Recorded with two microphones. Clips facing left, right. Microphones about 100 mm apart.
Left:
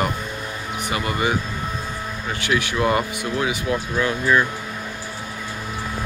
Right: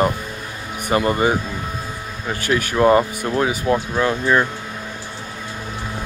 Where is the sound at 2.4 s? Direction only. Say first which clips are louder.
Right 5 dB; 45° right (ahead or behind).